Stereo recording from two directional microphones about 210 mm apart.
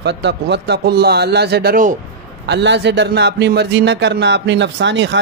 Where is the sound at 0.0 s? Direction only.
55° right (ahead or behind).